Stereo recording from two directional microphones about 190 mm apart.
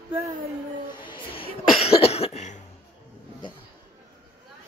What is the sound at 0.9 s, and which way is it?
Cough, 25° left (ahead or behind).